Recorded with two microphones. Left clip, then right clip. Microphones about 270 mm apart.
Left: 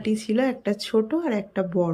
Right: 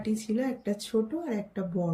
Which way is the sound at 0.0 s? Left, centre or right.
Centre.